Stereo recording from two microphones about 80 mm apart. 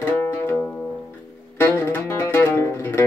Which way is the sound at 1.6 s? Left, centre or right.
Left.